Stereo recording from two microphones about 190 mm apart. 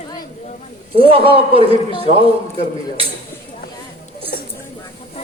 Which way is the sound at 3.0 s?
30° right (ahead or behind).